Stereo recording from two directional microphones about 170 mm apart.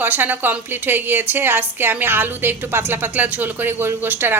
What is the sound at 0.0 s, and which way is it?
A woman's voice, 10° right (ahead or behind).